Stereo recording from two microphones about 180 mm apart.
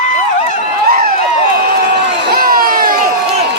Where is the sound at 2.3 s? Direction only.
55° right (ahead or behind).